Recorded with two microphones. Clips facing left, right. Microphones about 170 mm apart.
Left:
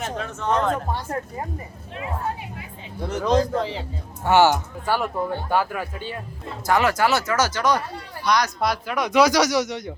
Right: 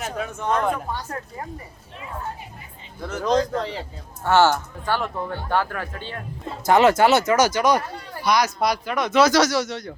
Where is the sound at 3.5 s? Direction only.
Centre (ahead or behind).